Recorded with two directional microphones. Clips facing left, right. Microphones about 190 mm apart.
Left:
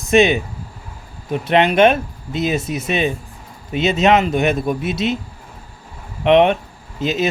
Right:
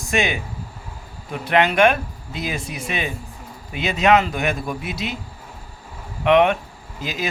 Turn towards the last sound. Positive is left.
turn(degrees=25)  # may be behind; listen again after turning